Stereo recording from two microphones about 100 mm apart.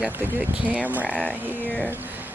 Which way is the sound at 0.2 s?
15° right (ahead or behind).